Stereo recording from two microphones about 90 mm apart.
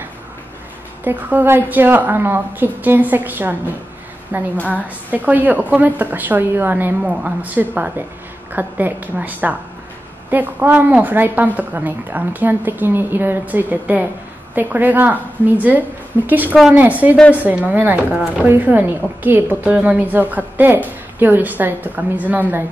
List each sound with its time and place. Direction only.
1.0 s a woman's voice: 25° right (ahead or behind)
4.6 s a woman's voice: 15° left (ahead or behind)
5.1 s a woman's voice: 20° right (ahead or behind)